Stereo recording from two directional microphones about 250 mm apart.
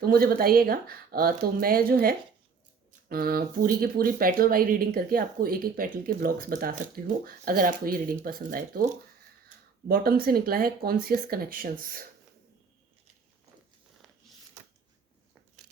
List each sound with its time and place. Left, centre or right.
0.0 s speech: right
9.9 s speech: right